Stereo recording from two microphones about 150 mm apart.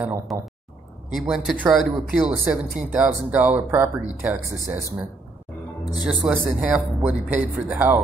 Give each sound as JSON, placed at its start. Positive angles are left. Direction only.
{"t": 1.1, "sound": "speech", "side_deg": -5}
{"t": 6.0, "sound": "speech", "side_deg": -5}